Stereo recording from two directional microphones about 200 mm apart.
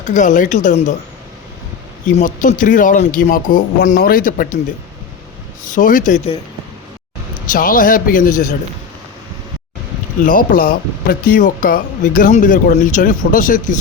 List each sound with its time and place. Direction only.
0.0 s speech: 40° left (ahead or behind)
2.1 s a man's voice: 35° left (ahead or behind)
5.6 s speech: 40° left (ahead or behind)
7.5 s a man's voice: 45° left (ahead or behind)
10.2 s speech: 45° left (ahead or behind)